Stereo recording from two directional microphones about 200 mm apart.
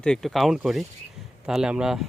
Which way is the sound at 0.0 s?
Centre (ahead or behind).